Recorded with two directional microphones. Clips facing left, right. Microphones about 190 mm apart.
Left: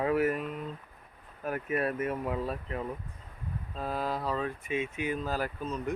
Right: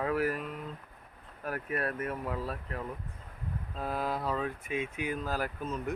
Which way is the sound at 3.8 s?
10° right (ahead or behind).